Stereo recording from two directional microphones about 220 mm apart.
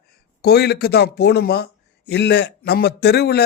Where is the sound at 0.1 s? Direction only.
45° left (ahead or behind).